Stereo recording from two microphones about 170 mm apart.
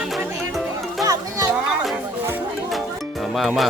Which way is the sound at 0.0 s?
Centre (ahead or behind).